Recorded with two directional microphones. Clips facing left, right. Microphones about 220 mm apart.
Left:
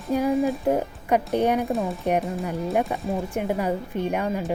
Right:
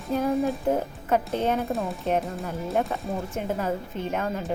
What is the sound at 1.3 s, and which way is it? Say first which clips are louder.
Speech: left 6 dB; 15° left (ahead or behind).